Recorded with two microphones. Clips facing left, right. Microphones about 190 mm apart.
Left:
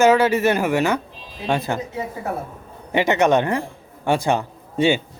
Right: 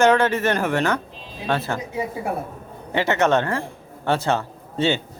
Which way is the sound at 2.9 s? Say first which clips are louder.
Left 2 dB; 15° left (ahead or behind).